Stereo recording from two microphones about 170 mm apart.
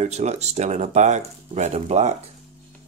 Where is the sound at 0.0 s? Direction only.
40° right (ahead or behind).